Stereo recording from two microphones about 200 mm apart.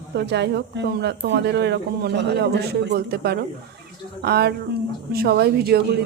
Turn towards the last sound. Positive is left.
turn(degrees=-55)  # may be behind; listen again after turning